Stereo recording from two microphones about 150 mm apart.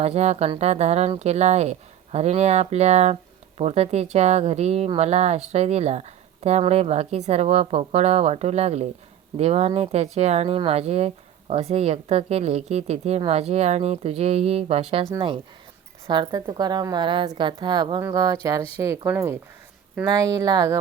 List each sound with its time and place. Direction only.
0.0 s speech: 45° right (ahead or behind)
16.0 s a woman's voice: 30° right (ahead or behind)